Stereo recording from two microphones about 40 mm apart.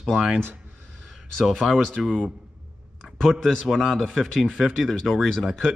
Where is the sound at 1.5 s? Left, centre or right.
Centre.